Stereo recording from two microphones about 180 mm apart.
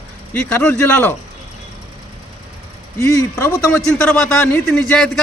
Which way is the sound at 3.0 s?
15° left (ahead or behind).